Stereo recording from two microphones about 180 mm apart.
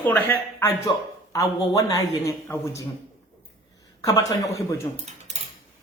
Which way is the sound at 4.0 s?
20° left (ahead or behind).